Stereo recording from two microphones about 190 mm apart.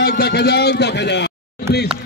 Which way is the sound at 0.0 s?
60° left (ahead or behind).